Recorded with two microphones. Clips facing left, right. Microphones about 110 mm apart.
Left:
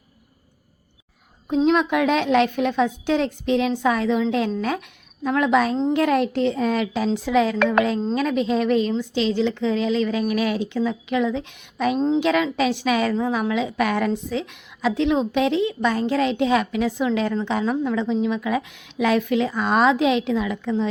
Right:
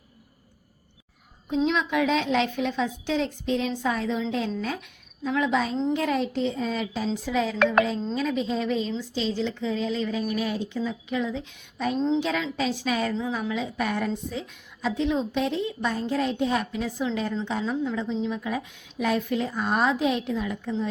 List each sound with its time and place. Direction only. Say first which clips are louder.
1.5 s a woman's voice: left 6 dB; 50° left (ahead or behind); by 11.9 s 75° left (ahead or behind)
11.9 s a woman's voice: left 3 dB; 45° left (ahead or behind)
12.2 s a woman's voice: left 7 dB; 75° left (ahead or behind); by 20.9 s 90° left